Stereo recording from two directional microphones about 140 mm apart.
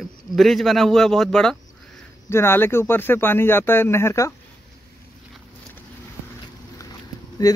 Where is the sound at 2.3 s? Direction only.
15° left (ahead or behind).